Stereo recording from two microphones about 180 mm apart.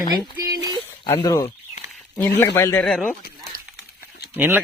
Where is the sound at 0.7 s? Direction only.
20° left (ahead or behind).